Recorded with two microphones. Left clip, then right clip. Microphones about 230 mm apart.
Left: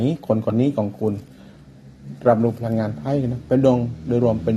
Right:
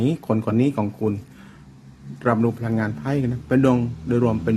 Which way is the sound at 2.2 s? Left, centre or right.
Centre.